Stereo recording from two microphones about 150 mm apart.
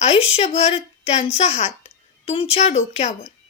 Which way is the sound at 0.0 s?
45° left (ahead or behind).